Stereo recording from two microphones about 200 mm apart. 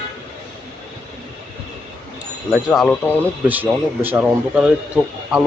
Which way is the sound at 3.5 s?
10° right (ahead or behind).